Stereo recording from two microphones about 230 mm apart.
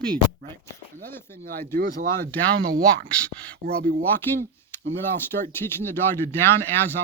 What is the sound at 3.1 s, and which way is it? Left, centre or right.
Speech, centre.